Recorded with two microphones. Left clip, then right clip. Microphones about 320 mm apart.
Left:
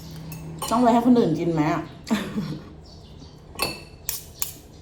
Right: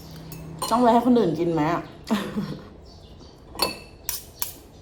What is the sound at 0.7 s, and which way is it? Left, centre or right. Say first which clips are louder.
Speech: even; centre.